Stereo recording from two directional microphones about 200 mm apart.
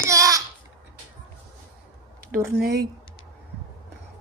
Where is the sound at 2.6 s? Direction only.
55° right (ahead or behind).